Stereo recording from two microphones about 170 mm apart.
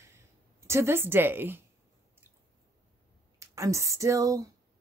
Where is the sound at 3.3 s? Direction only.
20° right (ahead or behind).